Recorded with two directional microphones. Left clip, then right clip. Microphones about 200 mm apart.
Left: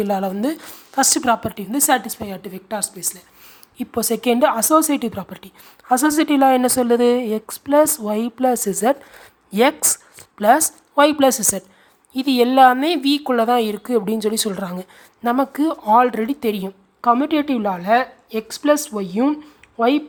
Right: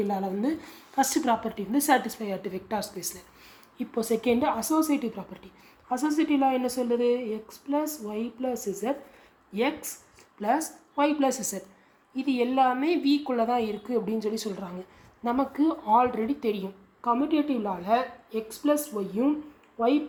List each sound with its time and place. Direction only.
0.0 s a woman's voice: 35° left (ahead or behind)
3.8 s a woman's voice: 35° left (ahead or behind)